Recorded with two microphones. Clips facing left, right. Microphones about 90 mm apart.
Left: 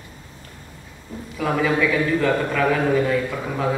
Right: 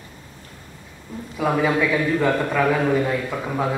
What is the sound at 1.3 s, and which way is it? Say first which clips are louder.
A man's voice: right 1 dB; 15° right (ahead or behind).